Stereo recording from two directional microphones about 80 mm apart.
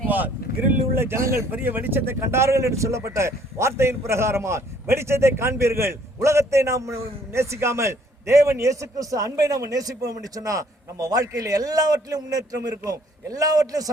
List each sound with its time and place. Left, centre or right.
0.1 s speech: right
1.5 s a man's voice: right